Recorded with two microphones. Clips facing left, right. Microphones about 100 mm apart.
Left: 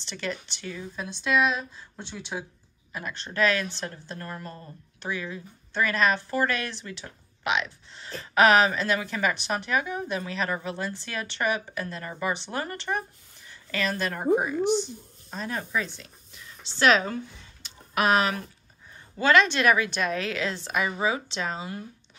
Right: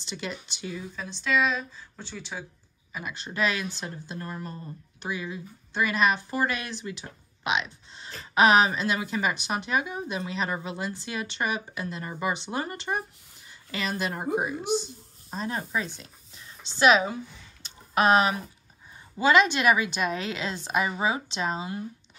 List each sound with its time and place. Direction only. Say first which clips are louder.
0.1 s a woman's voice: left 2 dB; 10° right (ahead or behind)
0.9 s speech: left 2 dB; 10° left (ahead or behind)
2.9 s a woman's voice: left 1 dB; 5° right (ahead or behind)
15.3 s a woman's voice: even; 25° right (ahead or behind)
16.7 s a woman's voice: right 1 dB; 15° right (ahead or behind)
17.6 s a sound: right 2 dB; 25° right (ahead or behind)
19.1 s a woman's voice: even; 10° right (ahead or behind)